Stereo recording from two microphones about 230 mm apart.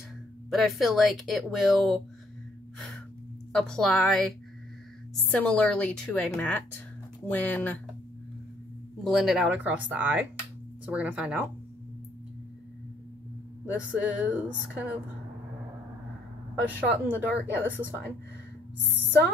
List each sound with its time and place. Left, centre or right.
0.5 s a woman's voice: centre
3.5 s a woman's voice: centre
9.0 s a woman's voice: centre
13.7 s a woman's voice: centre
16.6 s speech: centre